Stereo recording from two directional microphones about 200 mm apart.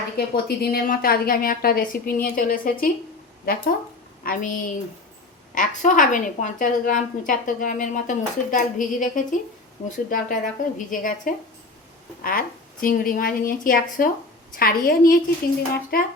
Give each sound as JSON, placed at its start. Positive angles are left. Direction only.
{"t": 0.2, "sound": "a woman's voice", "side_deg": 50}